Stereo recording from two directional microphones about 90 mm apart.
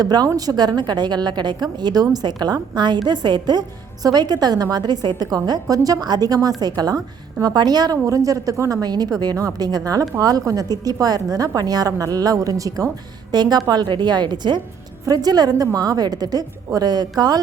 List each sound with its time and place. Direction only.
0.0 s a woman's voice: 50° right (ahead or behind)
8.8 s a woman's voice: 45° right (ahead or behind)
13.3 s a woman's voice: 50° right (ahead or behind)